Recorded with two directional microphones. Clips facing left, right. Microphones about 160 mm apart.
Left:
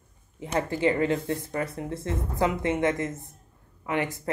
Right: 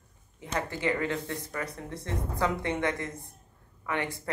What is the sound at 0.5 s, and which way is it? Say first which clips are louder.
Speech: left 6 dB; 30° left (ahead or behind).